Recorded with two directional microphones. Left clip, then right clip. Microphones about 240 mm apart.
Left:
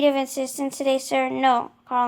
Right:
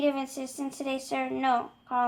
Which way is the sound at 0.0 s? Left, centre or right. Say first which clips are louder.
Left 8 dB; left.